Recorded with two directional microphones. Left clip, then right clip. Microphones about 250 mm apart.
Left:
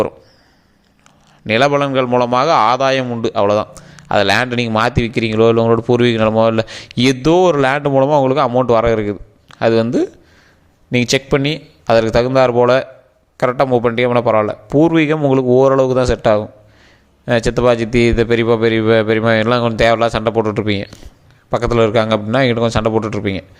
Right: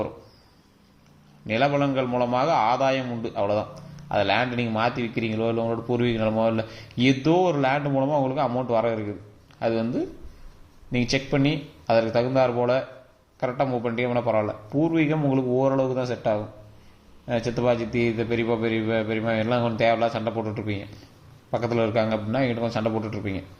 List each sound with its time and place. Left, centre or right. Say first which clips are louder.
1.5 s a man's voice: left 9 dB; left